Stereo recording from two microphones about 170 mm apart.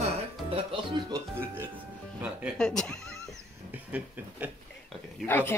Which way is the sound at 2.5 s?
5° left (ahead or behind).